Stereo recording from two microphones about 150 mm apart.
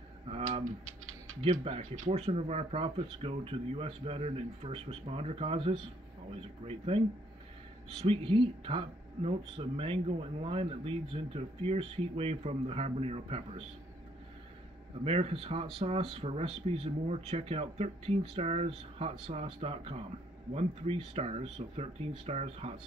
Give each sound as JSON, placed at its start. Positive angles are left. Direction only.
{"t": 1.6, "sound": "speech", "side_deg": -40}
{"t": 8.0, "sound": "speech", "side_deg": -35}
{"t": 15.0, "sound": "speech", "side_deg": -40}